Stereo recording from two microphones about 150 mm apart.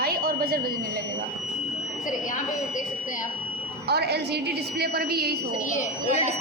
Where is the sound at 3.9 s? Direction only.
90° right.